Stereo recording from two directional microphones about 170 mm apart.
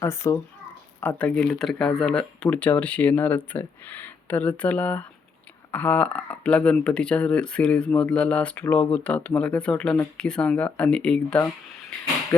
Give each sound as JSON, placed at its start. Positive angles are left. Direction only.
{"t": 0.0, "sound": "speech", "side_deg": 15}